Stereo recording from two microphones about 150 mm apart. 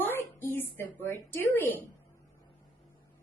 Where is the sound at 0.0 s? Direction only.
15° left (ahead or behind).